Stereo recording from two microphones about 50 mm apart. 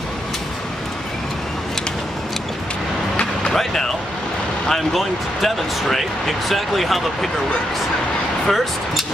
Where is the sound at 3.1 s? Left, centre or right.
Centre.